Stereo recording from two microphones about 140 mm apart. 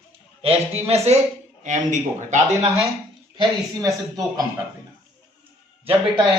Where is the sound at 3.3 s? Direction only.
25° right (ahead or behind).